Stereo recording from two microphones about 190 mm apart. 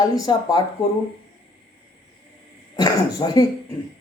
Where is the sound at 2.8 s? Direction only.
20° left (ahead or behind).